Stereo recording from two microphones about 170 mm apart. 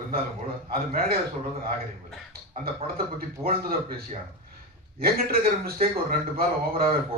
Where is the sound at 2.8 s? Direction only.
65° right (ahead or behind).